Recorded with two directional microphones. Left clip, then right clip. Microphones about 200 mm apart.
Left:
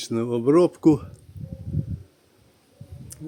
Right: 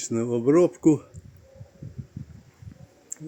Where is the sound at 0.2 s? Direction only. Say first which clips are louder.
Left 1 dB; 15° left (ahead or behind).